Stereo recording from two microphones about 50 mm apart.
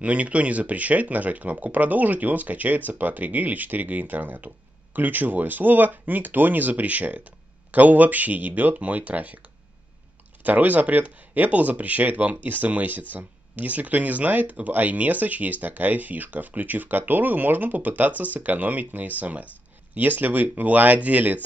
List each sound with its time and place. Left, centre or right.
0.0 s speech: right
10.4 s speech: right